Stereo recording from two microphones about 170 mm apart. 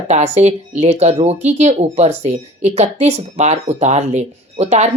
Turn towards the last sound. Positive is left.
turn(degrees=-40)  # may be behind; listen again after turning